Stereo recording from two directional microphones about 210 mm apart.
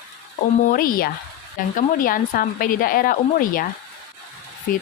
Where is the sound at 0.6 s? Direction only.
45° left (ahead or behind).